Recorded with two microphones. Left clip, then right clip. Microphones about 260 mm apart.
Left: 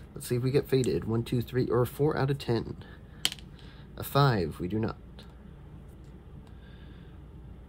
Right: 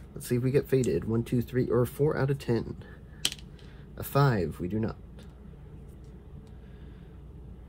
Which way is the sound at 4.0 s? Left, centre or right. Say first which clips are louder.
Left 1 dB; centre.